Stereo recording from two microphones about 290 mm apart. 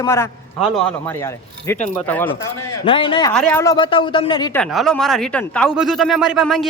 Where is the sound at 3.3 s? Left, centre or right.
Centre.